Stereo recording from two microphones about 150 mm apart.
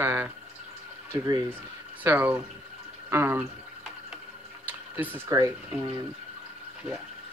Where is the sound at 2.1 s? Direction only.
10° right (ahead or behind).